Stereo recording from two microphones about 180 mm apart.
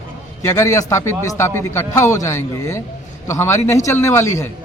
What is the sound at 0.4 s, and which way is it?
A man's voice, 15° left (ahead or behind).